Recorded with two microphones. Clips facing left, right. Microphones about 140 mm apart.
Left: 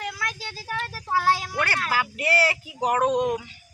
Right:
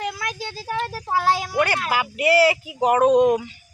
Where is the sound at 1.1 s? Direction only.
15° right (ahead or behind).